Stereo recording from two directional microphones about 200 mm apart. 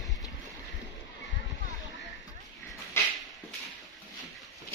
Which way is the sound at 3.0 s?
10° left (ahead or behind).